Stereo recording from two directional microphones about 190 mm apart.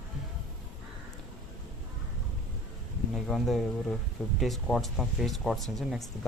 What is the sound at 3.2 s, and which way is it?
Speech, centre (ahead or behind).